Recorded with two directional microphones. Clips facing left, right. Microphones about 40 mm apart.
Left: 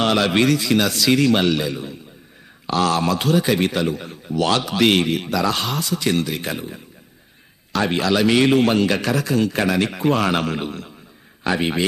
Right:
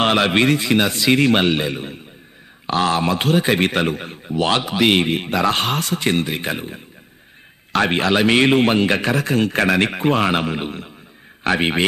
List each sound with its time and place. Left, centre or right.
0.0 s a man's voice: right
2.6 s a man's voice: right
4.3 s speech: right
4.7 s a man's voice: centre
5.0 s a man's voice: right
10.3 s a man's voice: centre
11.4 s a man's voice: right